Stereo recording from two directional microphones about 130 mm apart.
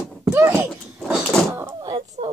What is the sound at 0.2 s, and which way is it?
Wail, 20° right (ahead or behind).